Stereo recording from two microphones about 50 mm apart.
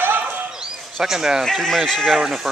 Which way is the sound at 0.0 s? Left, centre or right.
Right.